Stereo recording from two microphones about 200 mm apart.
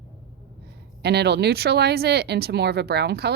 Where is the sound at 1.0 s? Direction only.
55° right (ahead or behind).